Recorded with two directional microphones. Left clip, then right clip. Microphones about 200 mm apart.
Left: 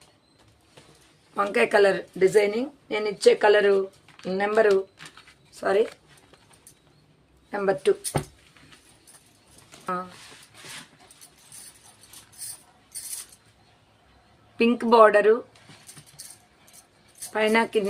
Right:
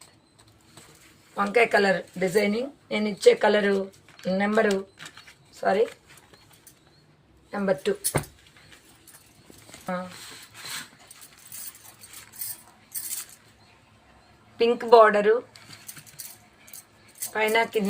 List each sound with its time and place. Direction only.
1.4 s speech: 55° left (ahead or behind)
4.7 s speech: 20° left (ahead or behind)
5.6 s speech: 50° left (ahead or behind)
7.5 s speech: 60° left (ahead or behind)
8.1 s speech: 5° right (ahead or behind)
14.6 s speech: 55° left (ahead or behind)
17.3 s speech: 55° left (ahead or behind)